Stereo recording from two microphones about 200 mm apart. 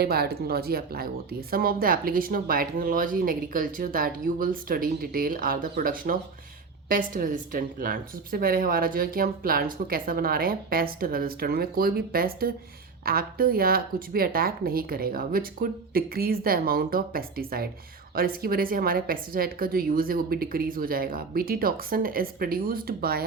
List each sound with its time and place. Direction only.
0.0 s a woman's voice: 50° right (ahead or behind)